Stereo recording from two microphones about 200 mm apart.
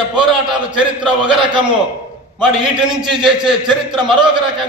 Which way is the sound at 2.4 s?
5° right (ahead or behind).